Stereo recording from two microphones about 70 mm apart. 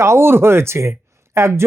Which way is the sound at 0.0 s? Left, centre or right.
Right.